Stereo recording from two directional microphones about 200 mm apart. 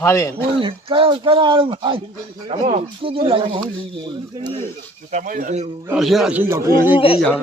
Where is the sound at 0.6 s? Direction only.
25° right (ahead or behind).